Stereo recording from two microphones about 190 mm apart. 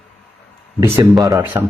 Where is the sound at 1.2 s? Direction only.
15° right (ahead or behind).